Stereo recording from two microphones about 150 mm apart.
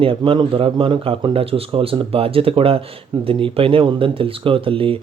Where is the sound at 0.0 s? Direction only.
35° right (ahead or behind).